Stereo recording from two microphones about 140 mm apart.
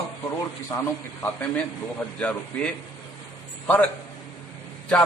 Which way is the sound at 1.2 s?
15° left (ahead or behind).